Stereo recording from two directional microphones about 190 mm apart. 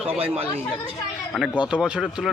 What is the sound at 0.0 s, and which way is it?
Speech, 5° right (ahead or behind).